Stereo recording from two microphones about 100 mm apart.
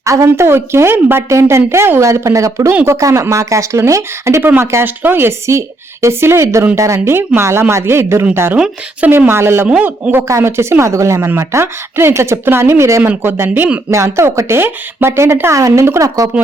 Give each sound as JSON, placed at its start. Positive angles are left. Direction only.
{"t": 0.0, "sound": "speech", "side_deg": -30}
{"t": 8.5, "sound": "a man's voice", "side_deg": -10}
{"t": 9.0, "sound": "speech", "side_deg": -25}
{"t": 9.6, "sound": "a man's voice", "side_deg": -15}